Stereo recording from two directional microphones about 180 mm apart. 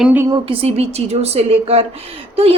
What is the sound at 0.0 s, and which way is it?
Speech, 10° right (ahead or behind).